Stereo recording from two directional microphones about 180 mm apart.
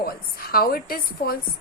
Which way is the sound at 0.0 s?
55° left (ahead or behind).